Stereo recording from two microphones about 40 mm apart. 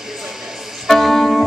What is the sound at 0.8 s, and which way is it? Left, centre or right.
Music, centre.